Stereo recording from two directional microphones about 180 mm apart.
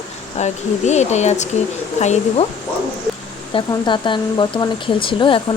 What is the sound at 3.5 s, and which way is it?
Speech, 25° left (ahead or behind).